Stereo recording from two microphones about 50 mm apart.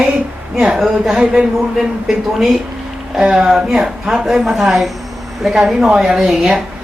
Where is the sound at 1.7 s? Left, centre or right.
Centre.